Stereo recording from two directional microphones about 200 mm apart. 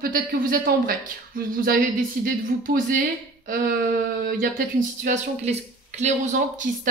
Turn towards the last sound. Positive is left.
turn(degrees=-35)  # may be behind; listen again after turning